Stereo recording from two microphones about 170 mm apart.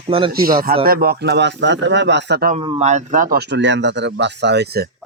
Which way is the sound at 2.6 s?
35° right (ahead or behind).